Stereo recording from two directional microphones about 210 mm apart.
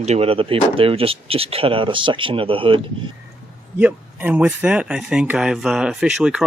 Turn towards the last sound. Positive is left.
turn(degrees=-5)  # may be behind; listen again after turning